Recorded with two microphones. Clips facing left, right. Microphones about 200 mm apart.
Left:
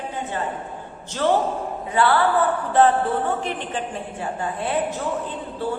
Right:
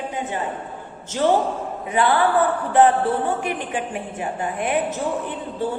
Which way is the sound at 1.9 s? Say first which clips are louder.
Right 1 dB; 15° right (ahead or behind).